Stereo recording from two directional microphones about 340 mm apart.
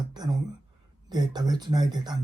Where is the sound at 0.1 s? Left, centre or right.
Centre.